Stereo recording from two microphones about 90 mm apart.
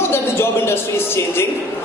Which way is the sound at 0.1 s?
25° left (ahead or behind).